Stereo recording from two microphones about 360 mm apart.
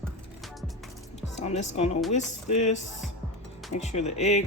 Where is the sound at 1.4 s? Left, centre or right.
Centre.